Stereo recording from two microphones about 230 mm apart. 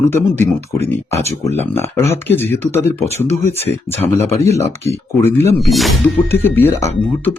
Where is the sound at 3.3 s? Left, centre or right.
Left.